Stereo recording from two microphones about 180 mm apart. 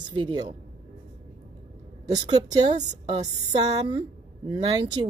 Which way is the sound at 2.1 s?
25° right (ahead or behind).